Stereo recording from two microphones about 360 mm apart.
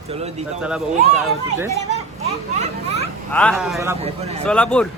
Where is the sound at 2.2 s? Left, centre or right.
Centre.